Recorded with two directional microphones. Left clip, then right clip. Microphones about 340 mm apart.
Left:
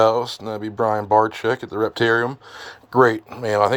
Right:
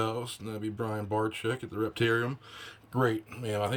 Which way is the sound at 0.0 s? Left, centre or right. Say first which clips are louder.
Left 16 dB; centre.